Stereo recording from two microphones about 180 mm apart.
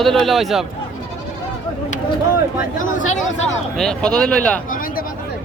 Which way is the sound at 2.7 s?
45° left (ahead or behind).